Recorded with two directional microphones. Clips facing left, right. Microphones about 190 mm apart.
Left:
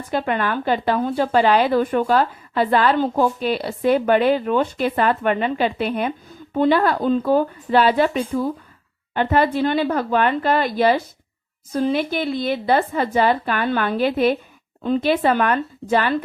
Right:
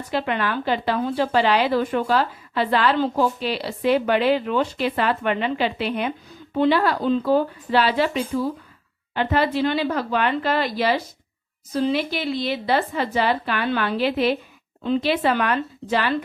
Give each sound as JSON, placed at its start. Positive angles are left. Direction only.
{"t": 0.1, "sound": "a woman's voice", "side_deg": 45}